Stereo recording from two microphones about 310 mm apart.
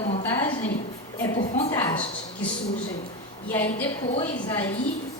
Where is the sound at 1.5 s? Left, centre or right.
Centre.